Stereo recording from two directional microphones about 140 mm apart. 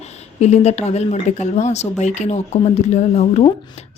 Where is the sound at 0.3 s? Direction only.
50° left (ahead or behind).